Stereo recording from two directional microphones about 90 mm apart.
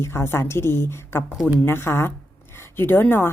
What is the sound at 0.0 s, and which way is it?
A woman's voice, 30° left (ahead or behind).